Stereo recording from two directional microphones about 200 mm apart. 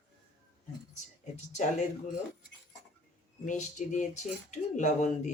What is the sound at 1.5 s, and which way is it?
Speech, 35° left (ahead or behind).